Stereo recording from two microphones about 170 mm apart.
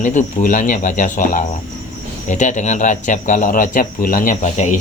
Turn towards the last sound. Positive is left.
turn(degrees=45)  # may be behind; listen again after turning